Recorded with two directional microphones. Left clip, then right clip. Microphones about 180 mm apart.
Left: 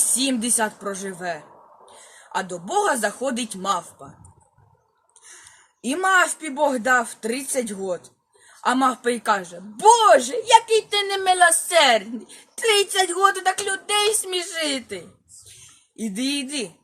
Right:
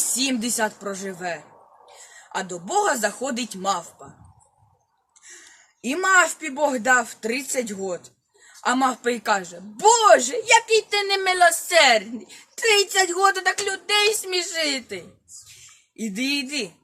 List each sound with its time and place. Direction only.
0.0 s a sound: 45° right (ahead or behind)
0.3 s speech: 10° right (ahead or behind)
5.5 s speech: 10° right (ahead or behind)